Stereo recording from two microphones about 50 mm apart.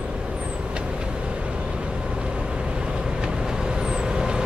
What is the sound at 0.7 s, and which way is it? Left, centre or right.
Vehicle, centre.